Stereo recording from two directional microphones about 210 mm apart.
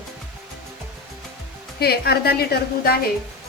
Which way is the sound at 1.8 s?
50° left (ahead or behind).